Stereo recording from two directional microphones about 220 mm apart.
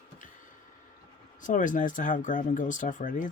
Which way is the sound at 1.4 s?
35° left (ahead or behind).